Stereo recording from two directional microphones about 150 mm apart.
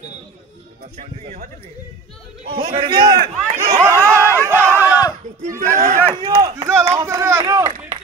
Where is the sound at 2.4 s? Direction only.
40° right (ahead or behind).